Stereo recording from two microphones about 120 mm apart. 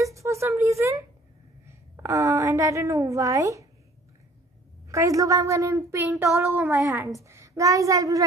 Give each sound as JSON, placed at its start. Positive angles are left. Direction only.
{"t": 0.0, "sound": "a sound", "side_deg": -25}
{"t": 1.7, "sound": "a woman's voice", "side_deg": -25}
{"t": 4.9, "sound": "a child's voice", "side_deg": -25}